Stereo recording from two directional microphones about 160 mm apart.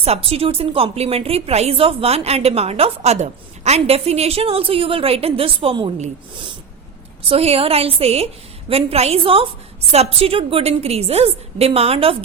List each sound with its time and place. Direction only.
0.0 s a woman's voice: 40° right (ahead or behind)